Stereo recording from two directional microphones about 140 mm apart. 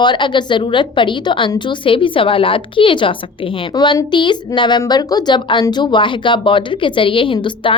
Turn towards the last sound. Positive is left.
turn(degrees=40)  # may be behind; listen again after turning